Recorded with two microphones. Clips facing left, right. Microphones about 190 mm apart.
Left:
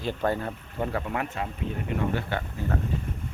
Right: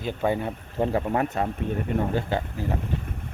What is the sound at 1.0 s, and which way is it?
Speech, 35° right (ahead or behind).